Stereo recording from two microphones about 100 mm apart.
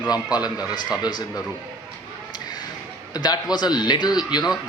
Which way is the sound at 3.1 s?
40° left (ahead or behind).